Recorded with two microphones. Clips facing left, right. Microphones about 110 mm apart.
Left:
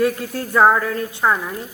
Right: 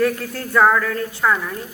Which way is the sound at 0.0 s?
20° left (ahead or behind).